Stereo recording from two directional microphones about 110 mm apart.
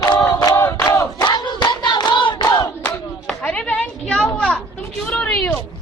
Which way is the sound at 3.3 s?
5° left (ahead or behind).